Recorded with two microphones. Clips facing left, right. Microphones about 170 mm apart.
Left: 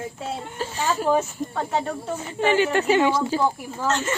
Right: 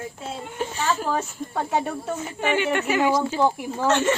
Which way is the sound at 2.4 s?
30° left (ahead or behind).